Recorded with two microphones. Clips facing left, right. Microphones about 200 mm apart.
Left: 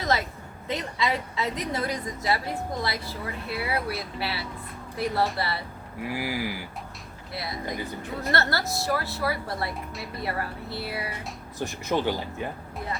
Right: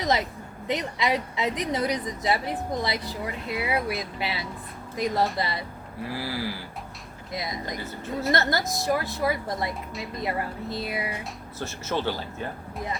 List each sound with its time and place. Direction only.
0.0 s a sound: 20° right (ahead or behind)
0.7 s a woman's voice: 20° right (ahead or behind)
6.0 s speech: 15° left (ahead or behind)
7.3 s a woman's voice: 15° right (ahead or behind)
7.8 s speech: 15° left (ahead or behind)
8.3 s a woman's voice: 15° right (ahead or behind)
11.6 s speech: 15° left (ahead or behind)